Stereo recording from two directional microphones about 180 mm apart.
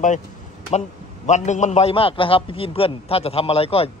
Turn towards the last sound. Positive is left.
turn(degrees=35)  # may be behind; listen again after turning